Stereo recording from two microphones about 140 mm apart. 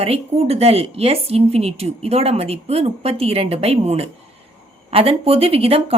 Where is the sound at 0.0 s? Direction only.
45° right (ahead or behind).